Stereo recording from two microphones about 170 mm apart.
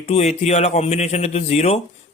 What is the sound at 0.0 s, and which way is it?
Speech, 40° left (ahead or behind).